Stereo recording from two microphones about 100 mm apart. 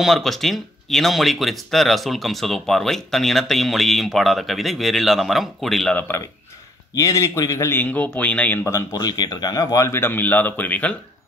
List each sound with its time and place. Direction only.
0.0 s speech: centre (ahead or behind)
5.9 s speech: 20° left (ahead or behind)
7.0 s speech: 35° left (ahead or behind); by 8.5 s 15° left (ahead or behind)
8.9 s speech: 45° left (ahead or behind); by 11.0 s 15° left (ahead or behind)